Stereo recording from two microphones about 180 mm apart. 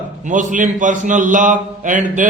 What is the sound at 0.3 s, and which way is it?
A man's voice, 45° right (ahead or behind).